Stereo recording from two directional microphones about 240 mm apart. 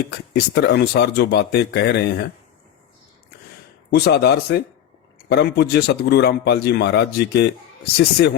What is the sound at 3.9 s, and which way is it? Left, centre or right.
Speech, left.